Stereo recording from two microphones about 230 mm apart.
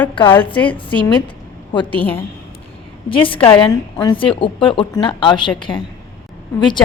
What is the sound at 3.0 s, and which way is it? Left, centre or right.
A woman's voice, left.